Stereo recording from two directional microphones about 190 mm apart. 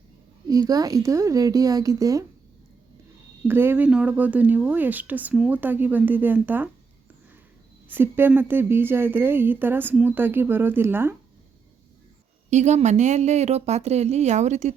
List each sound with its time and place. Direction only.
0.4 s a woman's voice: 20° right (ahead or behind)
3.4 s a woman's voice: 10° right (ahead or behind)
7.9 s a woman's voice: 10° right (ahead or behind)
12.5 s a woman's voice: 40° right (ahead or behind)